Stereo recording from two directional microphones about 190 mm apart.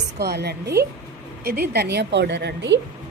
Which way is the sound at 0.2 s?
60° right (ahead or behind).